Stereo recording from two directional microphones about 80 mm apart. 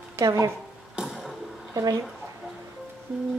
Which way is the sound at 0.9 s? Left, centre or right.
Centre.